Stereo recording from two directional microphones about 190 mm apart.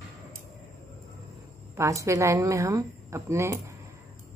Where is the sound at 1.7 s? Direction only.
15° right (ahead or behind).